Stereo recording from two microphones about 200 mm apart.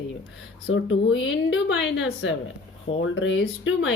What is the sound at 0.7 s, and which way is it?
Speech, 70° left (ahead or behind).